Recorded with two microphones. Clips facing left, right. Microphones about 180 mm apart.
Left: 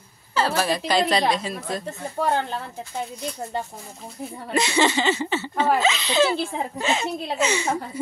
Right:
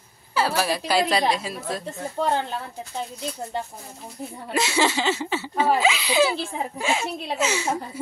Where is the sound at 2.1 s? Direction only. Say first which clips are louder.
Left 1 dB; 15° right (ahead or behind).